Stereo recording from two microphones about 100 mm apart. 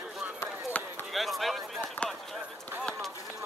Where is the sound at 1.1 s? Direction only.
Centre (ahead or behind).